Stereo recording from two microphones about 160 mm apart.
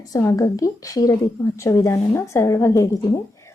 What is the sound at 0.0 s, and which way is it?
A woman's voice, 20° left (ahead or behind).